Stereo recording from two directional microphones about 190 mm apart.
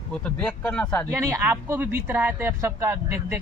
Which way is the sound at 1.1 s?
15° right (ahead or behind).